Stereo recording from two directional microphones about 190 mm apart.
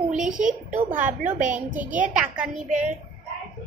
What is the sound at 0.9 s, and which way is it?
A woman's voice, 10° right (ahead or behind).